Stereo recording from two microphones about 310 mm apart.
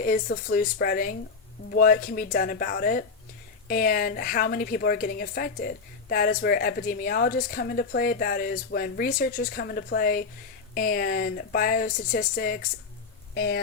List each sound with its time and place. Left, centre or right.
0.0 s speech: left